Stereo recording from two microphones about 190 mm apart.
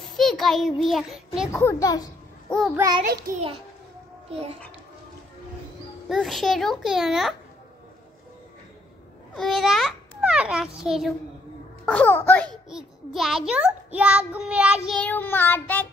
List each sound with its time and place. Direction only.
0.0 s a child's voice: centre (ahead or behind)
1.5 s a child's voice: 15° left (ahead or behind)
2.7 s child singing: 15° right (ahead or behind)
3.3 s a child's voice: 45° right (ahead or behind)
6.0 s child singing: centre (ahead or behind)
9.3 s a child's voice: centre (ahead or behind)
11.8 s child singing: 10° left (ahead or behind)
12.6 s child singing: centre (ahead or behind)
14.9 s child singing: 5° left (ahead or behind)